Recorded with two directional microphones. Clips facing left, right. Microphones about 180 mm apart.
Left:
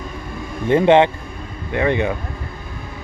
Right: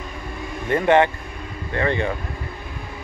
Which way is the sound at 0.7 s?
20° left (ahead or behind).